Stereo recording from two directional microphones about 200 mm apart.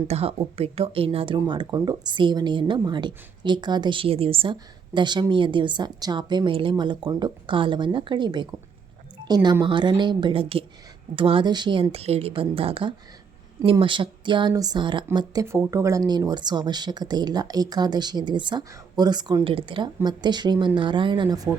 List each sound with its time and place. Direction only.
0.1 s speech: 30° right (ahead or behind)